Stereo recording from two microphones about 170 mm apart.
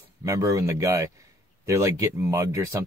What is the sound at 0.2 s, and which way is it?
Speech, 20° right (ahead or behind).